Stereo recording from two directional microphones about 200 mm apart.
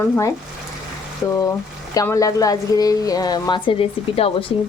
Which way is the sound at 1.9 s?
15° left (ahead or behind).